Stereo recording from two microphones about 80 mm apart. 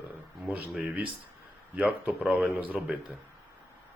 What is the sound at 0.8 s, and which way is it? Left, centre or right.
Speech, centre.